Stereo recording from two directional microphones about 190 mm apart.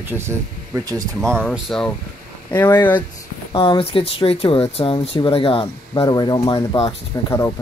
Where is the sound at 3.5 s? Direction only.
25° left (ahead or behind).